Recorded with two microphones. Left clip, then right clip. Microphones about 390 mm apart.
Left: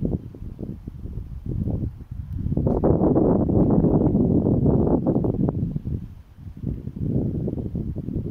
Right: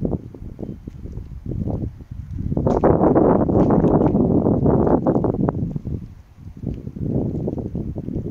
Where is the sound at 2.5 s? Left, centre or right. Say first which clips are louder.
Right 5 dB; right.